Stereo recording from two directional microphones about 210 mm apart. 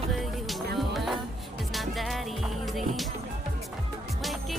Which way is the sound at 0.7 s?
Centre (ahead or behind).